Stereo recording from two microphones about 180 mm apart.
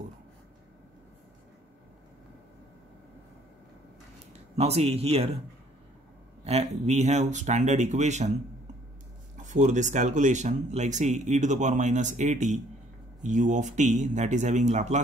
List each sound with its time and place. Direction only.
4.3 s speech: 35° right (ahead or behind)
6.4 s speech: 40° right (ahead or behind)
9.4 s speech: 45° right (ahead or behind)